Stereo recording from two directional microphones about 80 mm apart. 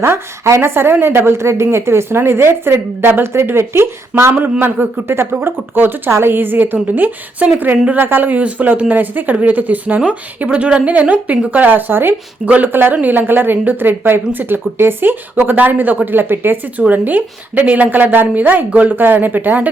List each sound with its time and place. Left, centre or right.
0.0 s a woman's voice: right